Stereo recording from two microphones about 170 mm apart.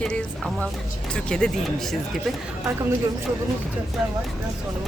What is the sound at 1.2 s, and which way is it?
Speech, 5° left (ahead or behind).